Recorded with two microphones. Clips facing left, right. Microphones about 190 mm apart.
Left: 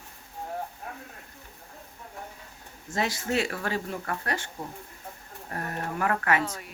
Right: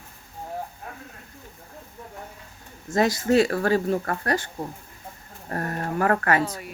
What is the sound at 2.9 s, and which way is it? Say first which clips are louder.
Speech: right 8 dB; 40° right (ahead or behind).